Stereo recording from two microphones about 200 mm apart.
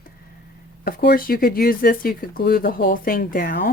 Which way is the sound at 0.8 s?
50° left (ahead or behind).